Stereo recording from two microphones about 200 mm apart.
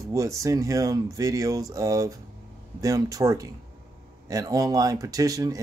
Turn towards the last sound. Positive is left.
turn(degrees=-15)  # may be behind; listen again after turning